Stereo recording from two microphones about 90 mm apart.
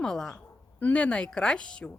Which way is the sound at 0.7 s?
15° left (ahead or behind).